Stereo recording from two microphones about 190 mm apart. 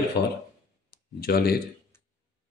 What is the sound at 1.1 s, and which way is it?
Speech, 50° left (ahead or behind).